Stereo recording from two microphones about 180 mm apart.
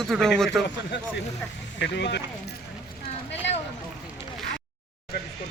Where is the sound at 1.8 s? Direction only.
70° left (ahead or behind).